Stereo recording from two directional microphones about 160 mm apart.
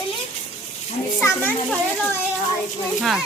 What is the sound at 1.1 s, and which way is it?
Children playing, 10° left (ahead or behind).